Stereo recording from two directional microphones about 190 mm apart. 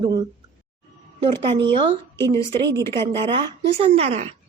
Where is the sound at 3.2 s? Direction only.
30° right (ahead or behind).